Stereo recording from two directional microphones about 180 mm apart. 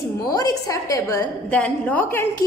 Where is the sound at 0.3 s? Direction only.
20° left (ahead or behind).